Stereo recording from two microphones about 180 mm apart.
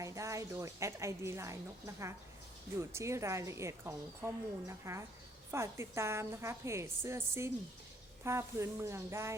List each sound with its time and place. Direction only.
0.0 s a woman's voice: 15° right (ahead or behind)
2.7 s speech: 15° right (ahead or behind)